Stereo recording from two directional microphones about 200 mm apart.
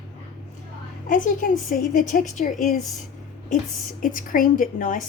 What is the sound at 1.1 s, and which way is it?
A woman's voice, 40° left (ahead or behind).